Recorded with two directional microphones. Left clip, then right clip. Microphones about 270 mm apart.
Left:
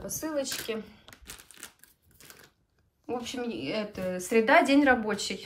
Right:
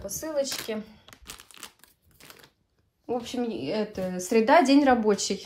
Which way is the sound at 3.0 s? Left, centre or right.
Centre.